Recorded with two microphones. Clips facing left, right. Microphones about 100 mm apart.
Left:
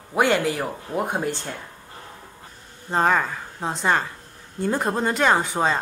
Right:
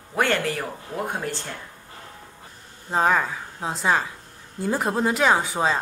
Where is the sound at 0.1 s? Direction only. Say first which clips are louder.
Left 3 dB; 15° left (ahead or behind).